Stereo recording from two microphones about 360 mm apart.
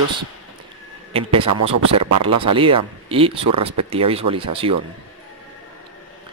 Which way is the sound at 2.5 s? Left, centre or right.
Centre.